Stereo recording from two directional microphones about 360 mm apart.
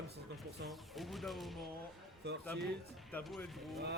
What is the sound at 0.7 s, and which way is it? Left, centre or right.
Speech, centre.